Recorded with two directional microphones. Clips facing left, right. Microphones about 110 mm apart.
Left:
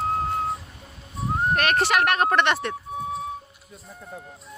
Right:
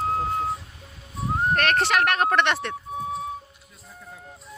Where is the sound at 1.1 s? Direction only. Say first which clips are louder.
Even; centre (ahead or behind).